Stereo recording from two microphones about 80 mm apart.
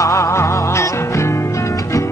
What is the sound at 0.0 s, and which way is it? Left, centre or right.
Music, left.